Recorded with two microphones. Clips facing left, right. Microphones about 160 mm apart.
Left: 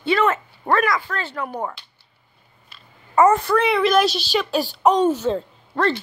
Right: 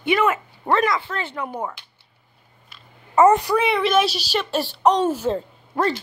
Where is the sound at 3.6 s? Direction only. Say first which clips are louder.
Left 2 dB; centre (ahead or behind).